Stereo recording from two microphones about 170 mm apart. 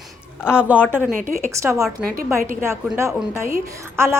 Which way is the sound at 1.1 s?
50° right (ahead or behind).